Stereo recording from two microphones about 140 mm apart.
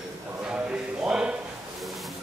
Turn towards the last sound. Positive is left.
turn(degrees=-5)  # may be behind; listen again after turning